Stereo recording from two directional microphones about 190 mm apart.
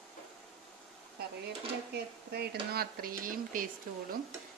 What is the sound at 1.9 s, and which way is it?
Speech, 55° right (ahead or behind).